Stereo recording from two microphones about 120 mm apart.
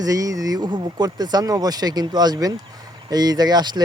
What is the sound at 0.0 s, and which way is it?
Speech, 30° right (ahead or behind).